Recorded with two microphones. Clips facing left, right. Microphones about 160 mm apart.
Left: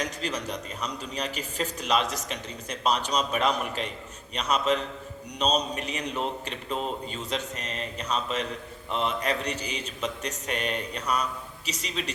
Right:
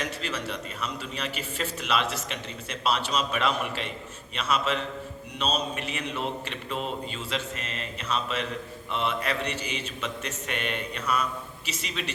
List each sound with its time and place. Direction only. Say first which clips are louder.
0.0 s a man's voice: left 1 dB; 35° left (ahead or behind)